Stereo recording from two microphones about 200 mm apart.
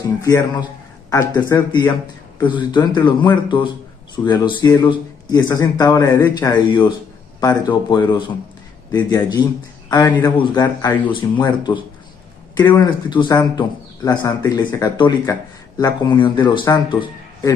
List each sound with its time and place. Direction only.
0.2 s a man's voice: 15° left (ahead or behind)